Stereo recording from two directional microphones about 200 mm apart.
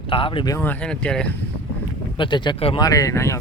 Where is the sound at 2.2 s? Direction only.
25° left (ahead or behind).